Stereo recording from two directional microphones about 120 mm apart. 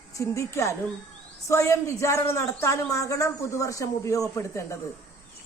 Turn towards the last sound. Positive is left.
turn(degrees=25)  # may be behind; listen again after turning